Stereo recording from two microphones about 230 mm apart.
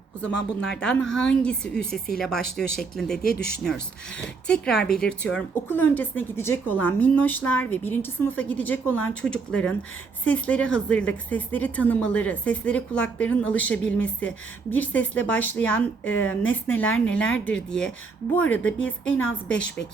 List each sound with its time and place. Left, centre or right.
0.6 s a woman's voice: centre
3.2 s speech: left
4.1 s a woman's voice: centre